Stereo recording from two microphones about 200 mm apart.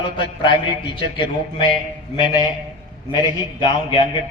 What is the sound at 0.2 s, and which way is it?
A man's voice, 25° left (ahead or behind).